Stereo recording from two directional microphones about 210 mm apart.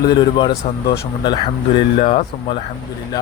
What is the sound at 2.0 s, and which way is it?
Speech, 35° left (ahead or behind).